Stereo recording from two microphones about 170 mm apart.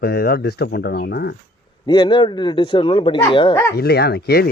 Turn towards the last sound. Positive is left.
turn(degrees=65)  # may be behind; listen again after turning